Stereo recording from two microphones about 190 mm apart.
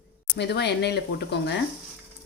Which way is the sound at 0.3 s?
60° left (ahead or behind).